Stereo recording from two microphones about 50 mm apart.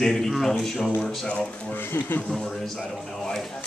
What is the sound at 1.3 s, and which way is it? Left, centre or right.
Speech, left.